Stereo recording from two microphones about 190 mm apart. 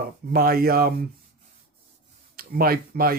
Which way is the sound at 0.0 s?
50° right (ahead or behind).